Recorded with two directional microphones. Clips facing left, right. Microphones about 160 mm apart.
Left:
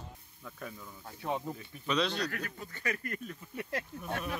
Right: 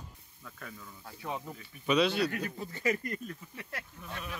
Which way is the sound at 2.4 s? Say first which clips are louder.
Right 5 dB; 30° right (ahead or behind).